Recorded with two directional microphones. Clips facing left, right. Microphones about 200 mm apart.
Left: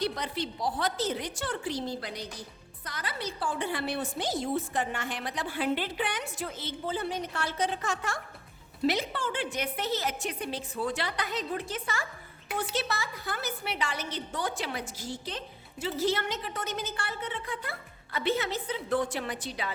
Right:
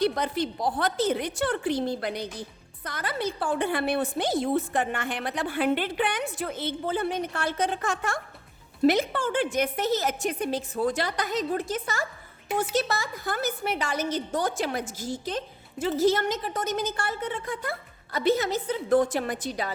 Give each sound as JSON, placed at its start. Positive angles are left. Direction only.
{"t": 0.0, "sound": "a woman's voice", "side_deg": -50}